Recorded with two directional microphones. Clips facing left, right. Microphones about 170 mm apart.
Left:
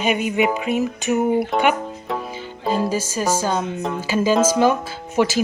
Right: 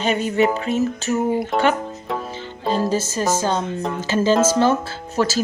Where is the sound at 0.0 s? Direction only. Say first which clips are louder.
Right 1 dB; 15° left (ahead or behind).